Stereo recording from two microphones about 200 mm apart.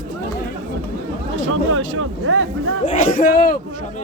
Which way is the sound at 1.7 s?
85° right.